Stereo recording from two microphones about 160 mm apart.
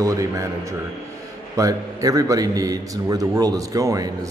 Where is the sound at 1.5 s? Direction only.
20° right (ahead or behind).